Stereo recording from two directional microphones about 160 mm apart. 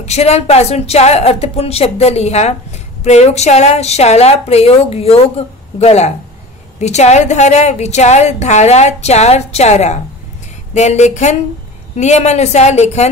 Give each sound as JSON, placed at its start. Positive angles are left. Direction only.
{"t": 0.0, "sound": "a woman's voice", "side_deg": 40}